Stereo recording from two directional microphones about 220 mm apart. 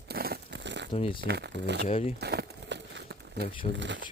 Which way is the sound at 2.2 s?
50° right (ahead or behind).